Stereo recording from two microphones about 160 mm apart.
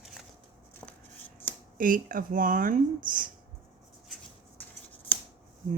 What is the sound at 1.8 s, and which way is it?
Speech, 60° right (ahead or behind).